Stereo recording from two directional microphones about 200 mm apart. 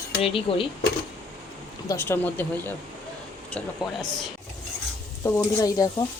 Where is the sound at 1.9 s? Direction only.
10° left (ahead or behind).